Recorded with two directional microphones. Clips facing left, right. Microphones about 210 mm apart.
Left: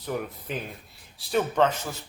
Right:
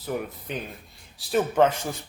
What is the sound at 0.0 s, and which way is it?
Speech, centre (ahead or behind).